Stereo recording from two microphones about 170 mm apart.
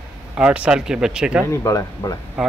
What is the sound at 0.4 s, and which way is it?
Speech, 5° right (ahead or behind).